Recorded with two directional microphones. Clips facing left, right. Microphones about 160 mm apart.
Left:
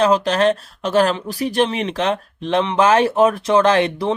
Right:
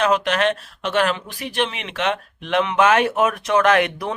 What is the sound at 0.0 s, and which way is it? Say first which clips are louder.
Speech: left 4 dB; 35° left (ahead or behind).